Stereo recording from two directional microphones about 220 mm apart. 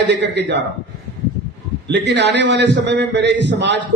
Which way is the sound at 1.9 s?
50° right (ahead or behind).